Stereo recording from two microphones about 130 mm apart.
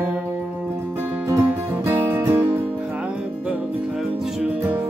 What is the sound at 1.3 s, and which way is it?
Music, 20° right (ahead or behind).